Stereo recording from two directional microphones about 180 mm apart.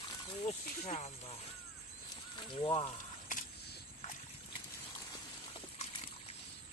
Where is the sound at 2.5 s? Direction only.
30° left (ahead or behind).